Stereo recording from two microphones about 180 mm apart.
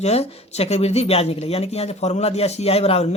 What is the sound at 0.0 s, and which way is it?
Speech, 35° left (ahead or behind).